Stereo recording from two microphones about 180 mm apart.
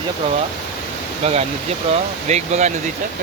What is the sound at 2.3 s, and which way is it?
Speech, 40° right (ahead or behind).